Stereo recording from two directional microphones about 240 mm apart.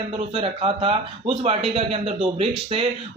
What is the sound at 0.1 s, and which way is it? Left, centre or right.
Speech, right.